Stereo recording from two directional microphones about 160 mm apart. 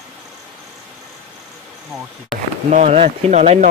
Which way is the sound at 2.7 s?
45° right (ahead or behind).